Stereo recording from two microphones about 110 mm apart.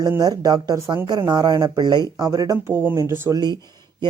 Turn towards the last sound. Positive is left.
turn(degrees=-40)  # may be behind; listen again after turning